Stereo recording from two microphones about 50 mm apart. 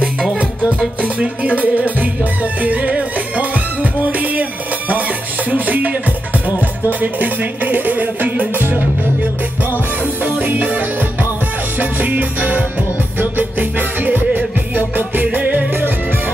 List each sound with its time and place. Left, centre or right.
1.0 s music: right
10.2 s music: right